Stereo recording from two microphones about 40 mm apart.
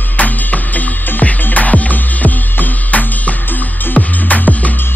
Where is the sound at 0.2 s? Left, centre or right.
Left.